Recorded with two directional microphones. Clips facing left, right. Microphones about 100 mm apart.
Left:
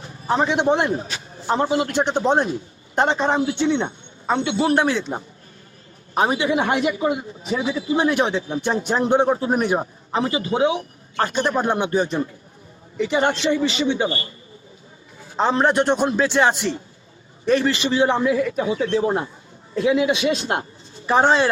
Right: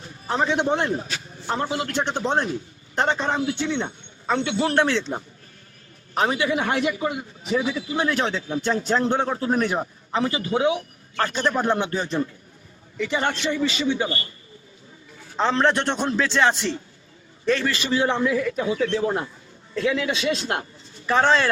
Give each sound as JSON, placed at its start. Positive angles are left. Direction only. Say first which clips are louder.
{"t": 0.0, "sound": "a man's voice", "louder": "left 3 dB", "side_deg": 25}
{"t": 15.4, "sound": "a man's voice", "louder": "left 3 dB", "side_deg": 15}